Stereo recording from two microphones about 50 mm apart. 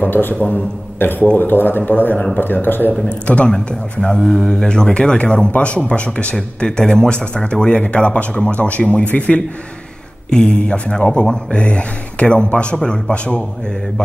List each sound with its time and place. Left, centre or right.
0.0 s speech: left
3.1 s speech: left
6.3 s speech: centre; by 9.4 s left
10.3 s speech: centre